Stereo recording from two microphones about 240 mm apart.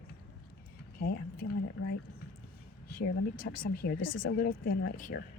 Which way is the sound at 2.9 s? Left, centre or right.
Left.